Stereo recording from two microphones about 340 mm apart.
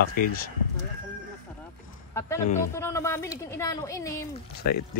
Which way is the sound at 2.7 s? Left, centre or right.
Centre.